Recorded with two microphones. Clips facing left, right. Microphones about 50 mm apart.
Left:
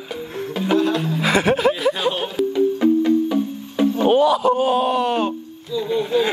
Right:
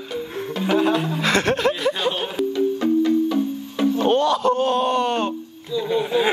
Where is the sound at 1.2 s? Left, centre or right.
Centre.